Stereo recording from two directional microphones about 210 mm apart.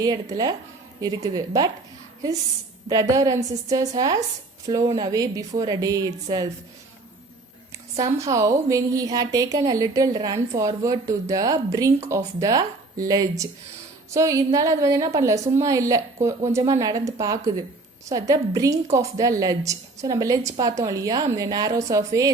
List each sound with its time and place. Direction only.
0.0 s a woman's voice: 20° right (ahead or behind)
2.9 s a woman's voice: 15° right (ahead or behind)
7.9 s a woman's voice: 15° right (ahead or behind)
14.1 s a woman's voice: 15° right (ahead or behind)